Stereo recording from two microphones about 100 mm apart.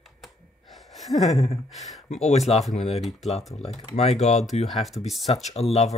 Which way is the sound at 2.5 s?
90° left.